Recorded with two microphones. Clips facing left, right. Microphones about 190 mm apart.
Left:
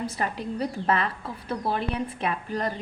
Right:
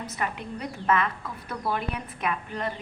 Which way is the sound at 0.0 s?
30° left (ahead or behind).